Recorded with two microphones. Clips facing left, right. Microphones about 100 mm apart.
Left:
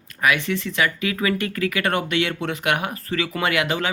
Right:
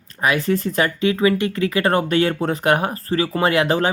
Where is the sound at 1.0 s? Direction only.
25° right (ahead or behind).